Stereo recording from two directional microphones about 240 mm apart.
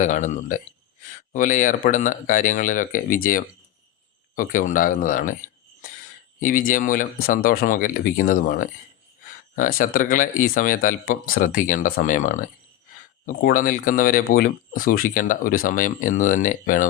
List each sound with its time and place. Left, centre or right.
0.0 s speech: left
6.4 s speech: left